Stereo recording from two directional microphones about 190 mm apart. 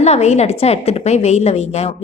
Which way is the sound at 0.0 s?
35° left (ahead or behind).